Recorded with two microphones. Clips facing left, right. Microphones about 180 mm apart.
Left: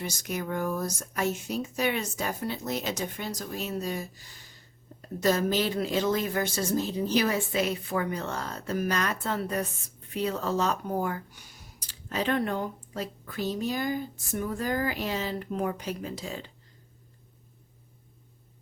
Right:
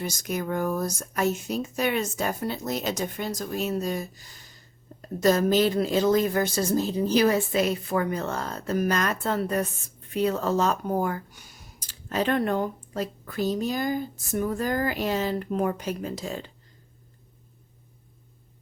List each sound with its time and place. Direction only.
0.0 s speech: 45° right (ahead or behind)